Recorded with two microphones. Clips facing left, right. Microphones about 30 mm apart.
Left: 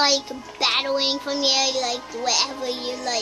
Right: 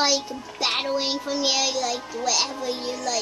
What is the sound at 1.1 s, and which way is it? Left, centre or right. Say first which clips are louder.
Child singing: left 2 dB; left.